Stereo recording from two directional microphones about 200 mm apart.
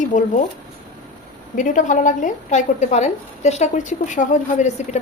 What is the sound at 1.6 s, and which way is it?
A woman's voice, 40° left (ahead or behind).